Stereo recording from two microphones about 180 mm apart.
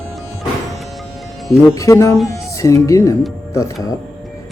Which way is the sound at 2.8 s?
15° left (ahead or behind).